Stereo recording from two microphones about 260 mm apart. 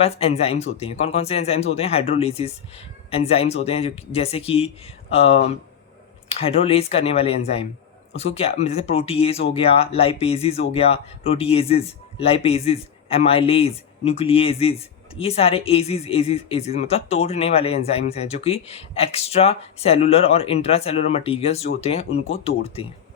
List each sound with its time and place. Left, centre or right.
0.0 s speech: left